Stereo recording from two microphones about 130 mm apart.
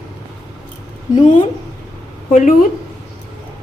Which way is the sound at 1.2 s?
65° left (ahead or behind).